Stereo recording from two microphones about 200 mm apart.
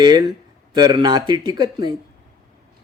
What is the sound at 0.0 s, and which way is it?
A man's voice, 20° right (ahead or behind).